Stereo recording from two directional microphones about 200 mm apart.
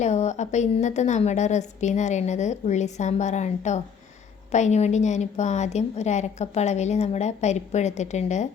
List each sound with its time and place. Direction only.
0.0 s a woman's voice: 35° left (ahead or behind)